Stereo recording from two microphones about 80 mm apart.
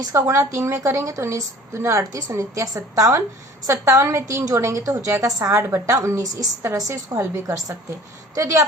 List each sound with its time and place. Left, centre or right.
0.1 s a woman's voice: right